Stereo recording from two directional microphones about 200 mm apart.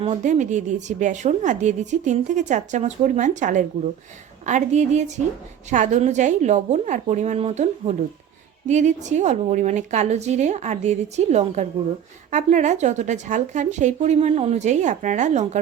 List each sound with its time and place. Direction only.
0.0 s a woman's voice: 35° right (ahead or behind)